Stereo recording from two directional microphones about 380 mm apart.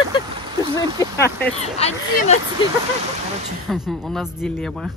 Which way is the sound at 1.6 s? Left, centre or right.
Centre.